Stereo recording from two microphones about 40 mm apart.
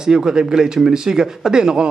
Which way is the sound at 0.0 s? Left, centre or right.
Centre.